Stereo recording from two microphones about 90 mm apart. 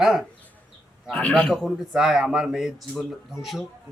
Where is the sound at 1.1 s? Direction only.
10° left (ahead or behind).